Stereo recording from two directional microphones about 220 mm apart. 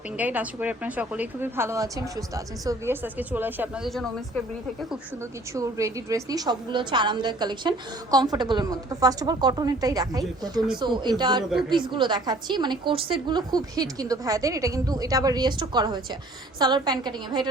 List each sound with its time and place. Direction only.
0.2 s a woman's voice: 5° right (ahead or behind)
5.5 s a woman's voice: 15° right (ahead or behind)